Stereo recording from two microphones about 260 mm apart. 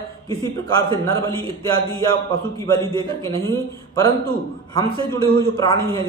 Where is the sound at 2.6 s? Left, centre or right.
Centre.